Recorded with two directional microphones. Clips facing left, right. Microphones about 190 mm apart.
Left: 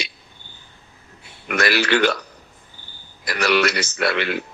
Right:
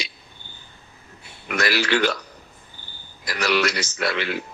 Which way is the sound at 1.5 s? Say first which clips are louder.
Left 3 dB; 60° left (ahead or behind).